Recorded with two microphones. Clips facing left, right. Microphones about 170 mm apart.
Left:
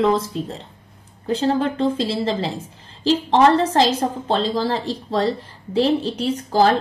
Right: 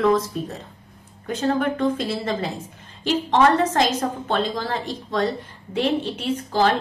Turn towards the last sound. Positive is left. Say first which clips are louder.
# left 3 dB
turn(degrees=35)  # may be behind; listen again after turning